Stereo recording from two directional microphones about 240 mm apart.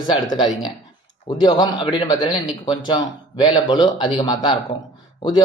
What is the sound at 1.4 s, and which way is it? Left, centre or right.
A man's voice, centre.